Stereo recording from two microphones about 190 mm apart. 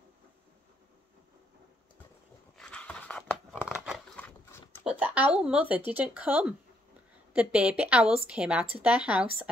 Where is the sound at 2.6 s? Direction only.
5° left (ahead or behind).